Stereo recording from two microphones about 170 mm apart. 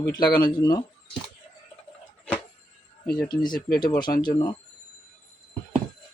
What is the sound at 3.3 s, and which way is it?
Speech, 25° left (ahead or behind).